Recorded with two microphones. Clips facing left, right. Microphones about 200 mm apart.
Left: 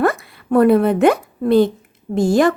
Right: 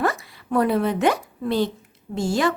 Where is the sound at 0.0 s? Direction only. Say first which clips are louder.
Left 6 dB; 55° left (ahead or behind).